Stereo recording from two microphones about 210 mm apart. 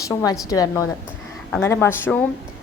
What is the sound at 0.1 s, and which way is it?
A woman's voice, 15° left (ahead or behind).